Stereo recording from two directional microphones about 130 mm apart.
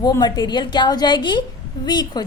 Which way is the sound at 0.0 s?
30° left (ahead or behind).